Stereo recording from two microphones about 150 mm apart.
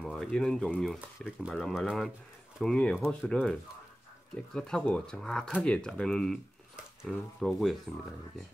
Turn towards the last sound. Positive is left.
turn(degrees=0)  # may be behind; listen again after turning